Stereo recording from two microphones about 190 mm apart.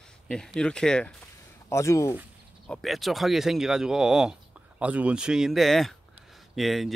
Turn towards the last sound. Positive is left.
turn(degrees=0)  # may be behind; listen again after turning